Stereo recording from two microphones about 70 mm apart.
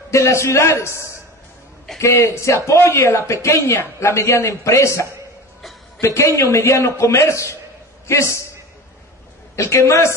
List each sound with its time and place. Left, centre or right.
0.1 s a man's voice: left
9.6 s a man's voice: left